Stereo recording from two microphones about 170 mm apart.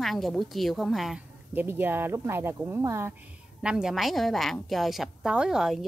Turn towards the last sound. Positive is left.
turn(degrees=0)  # may be behind; listen again after turning